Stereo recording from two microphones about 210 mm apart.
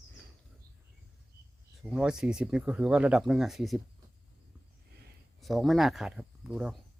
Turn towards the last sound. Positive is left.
turn(degrees=-5)  # may be behind; listen again after turning